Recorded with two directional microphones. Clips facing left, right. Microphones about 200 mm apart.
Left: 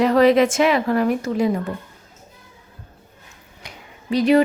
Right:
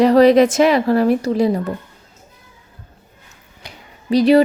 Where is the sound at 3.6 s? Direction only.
35° right (ahead or behind).